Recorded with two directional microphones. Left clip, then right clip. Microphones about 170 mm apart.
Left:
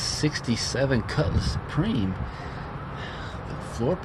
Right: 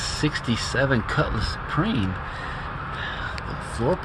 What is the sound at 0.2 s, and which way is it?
Speech, 15° right (ahead or behind).